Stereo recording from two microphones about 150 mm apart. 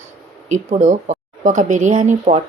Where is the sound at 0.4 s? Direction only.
55° right (ahead or behind).